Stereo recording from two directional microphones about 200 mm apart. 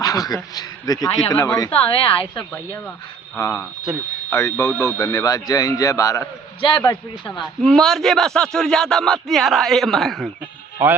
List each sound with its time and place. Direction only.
0.0 s a man's voice: 20° left (ahead or behind)
1.7 s a woman's voice: 30° left (ahead or behind)
3.3 s a man's voice: 15° left (ahead or behind)
7.6 s speech: centre (ahead or behind)